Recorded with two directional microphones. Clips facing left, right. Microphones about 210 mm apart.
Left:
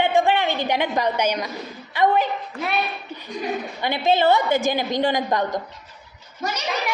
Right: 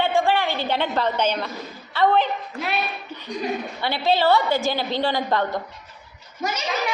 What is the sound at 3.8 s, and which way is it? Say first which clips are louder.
A woman's voice: left 2 dB; 20° left (ahead or behind).